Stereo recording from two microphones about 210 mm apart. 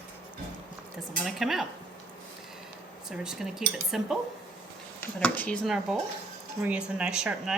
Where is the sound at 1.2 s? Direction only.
Centre (ahead or behind).